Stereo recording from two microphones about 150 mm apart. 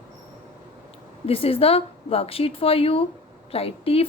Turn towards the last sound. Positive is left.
turn(degrees=40)  # may be behind; listen again after turning